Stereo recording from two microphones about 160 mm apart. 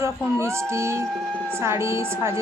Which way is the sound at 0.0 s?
15° right (ahead or behind).